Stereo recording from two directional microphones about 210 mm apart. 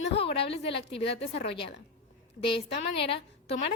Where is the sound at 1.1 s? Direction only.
25° left (ahead or behind).